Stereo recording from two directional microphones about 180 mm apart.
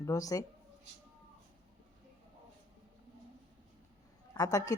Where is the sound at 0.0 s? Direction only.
20° left (ahead or behind).